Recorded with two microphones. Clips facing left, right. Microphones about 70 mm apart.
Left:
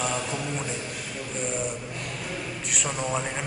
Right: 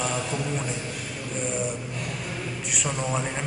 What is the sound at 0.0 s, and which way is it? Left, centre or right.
Speech, centre.